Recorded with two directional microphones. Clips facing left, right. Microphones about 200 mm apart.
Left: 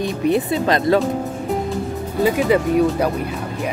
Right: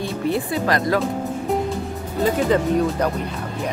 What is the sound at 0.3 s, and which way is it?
Speech, 20° left (ahead or behind).